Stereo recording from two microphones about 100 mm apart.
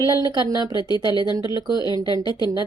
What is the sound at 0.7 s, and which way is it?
A woman's voice, 45° left (ahead or behind).